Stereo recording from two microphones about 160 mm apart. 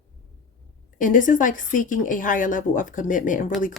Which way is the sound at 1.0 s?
55° left (ahead or behind).